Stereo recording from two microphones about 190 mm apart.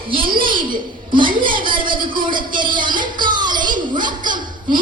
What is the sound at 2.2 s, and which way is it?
Music, 25° right (ahead or behind).